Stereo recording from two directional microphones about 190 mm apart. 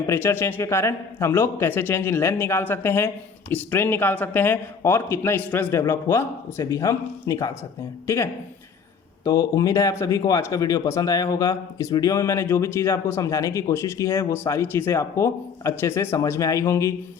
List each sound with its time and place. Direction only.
0.1 s speech: 15° left (ahead or behind)